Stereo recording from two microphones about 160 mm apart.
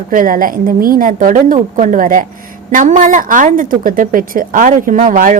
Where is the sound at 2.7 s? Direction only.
50° right (ahead or behind).